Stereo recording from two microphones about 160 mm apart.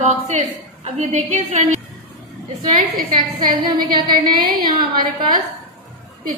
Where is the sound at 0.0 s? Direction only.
45° right (ahead or behind).